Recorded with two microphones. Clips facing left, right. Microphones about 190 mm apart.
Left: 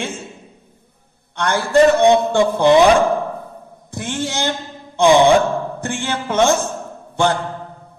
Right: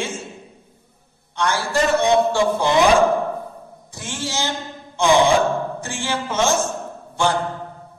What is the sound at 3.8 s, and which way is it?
Speech, 60° left (ahead or behind).